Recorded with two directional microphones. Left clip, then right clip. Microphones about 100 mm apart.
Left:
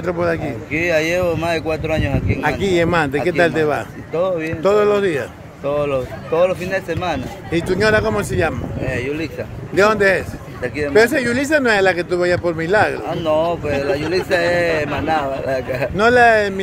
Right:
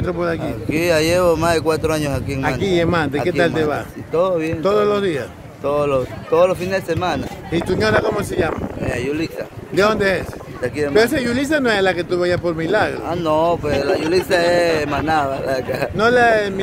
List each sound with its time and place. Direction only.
0.0 s speech: 5° left (ahead or behind)
0.7 s speech: 40° right (ahead or behind)
1.6 s speech: 75° right (ahead or behind)
2.6 s speech: 5° left (ahead or behind)
4.1 s speech: 65° right (ahead or behind)
4.6 s speech: 5° right (ahead or behind)
5.6 s speech: 90° right
5.9 s speech: 55° right (ahead or behind)
7.5 s speech: 15° left (ahead or behind)
8.9 s speech: 60° right (ahead or behind)
9.8 s speech: centre (ahead or behind)
13.1 s speech: 70° right (ahead or behind)
16.0 s speech: 5° left (ahead or behind)